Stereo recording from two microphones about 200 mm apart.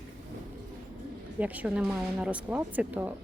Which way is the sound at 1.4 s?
5° right (ahead or behind).